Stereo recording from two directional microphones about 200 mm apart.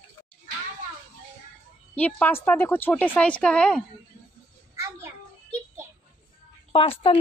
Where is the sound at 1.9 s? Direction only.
5° left (ahead or behind).